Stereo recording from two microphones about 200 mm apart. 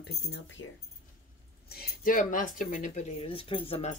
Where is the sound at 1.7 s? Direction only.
45° left (ahead or behind).